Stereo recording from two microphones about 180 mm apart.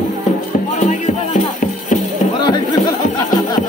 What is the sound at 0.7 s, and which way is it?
Music, 45° left (ahead or behind).